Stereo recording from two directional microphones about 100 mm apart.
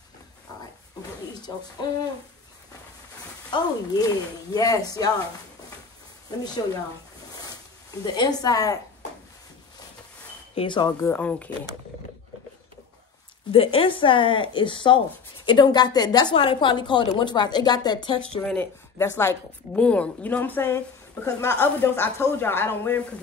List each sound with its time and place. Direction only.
1.5 s speech: 35° left (ahead or behind)
3.4 s speech: 40° left (ahead or behind)
6.4 s a woman's voice: 45° left (ahead or behind)
8.1 s speech: 40° left (ahead or behind)
10.5 s speech: 65° left (ahead or behind)
10.8 s speech: 40° left (ahead or behind)
11.1 s speech: 15° left (ahead or behind)
13.5 s a woman's voice: 70° left (ahead or behind); by 18.2 s 45° left (ahead or behind)
18.6 s speech: 25° left (ahead or behind)
19.7 s a woman's voice: 10° left (ahead or behind)